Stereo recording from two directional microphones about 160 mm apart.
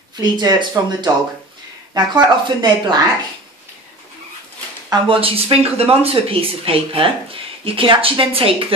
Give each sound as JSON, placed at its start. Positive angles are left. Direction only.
{"t": 0.2, "sound": "speech", "side_deg": -25}
{"t": 4.8, "sound": "speech", "side_deg": -30}